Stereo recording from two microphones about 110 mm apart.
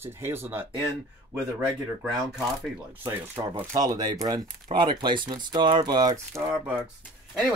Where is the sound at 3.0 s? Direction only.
20° right (ahead or behind).